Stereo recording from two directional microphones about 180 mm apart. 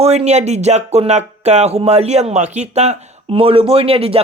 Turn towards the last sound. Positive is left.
turn(degrees=-30)  # may be behind; listen again after turning